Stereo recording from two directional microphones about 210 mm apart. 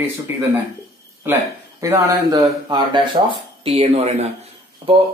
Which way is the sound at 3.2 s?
25° right (ahead or behind).